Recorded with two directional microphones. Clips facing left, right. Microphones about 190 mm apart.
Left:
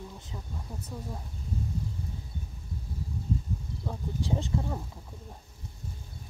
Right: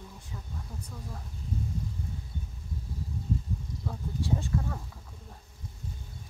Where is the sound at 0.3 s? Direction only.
20° left (ahead or behind).